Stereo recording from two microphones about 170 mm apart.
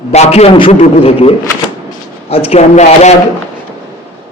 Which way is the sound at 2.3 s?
35° left (ahead or behind).